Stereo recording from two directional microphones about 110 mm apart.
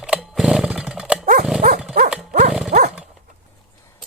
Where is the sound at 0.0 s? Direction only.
5° right (ahead or behind).